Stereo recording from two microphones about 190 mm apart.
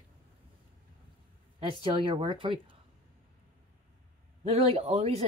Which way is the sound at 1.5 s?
25° right (ahead or behind).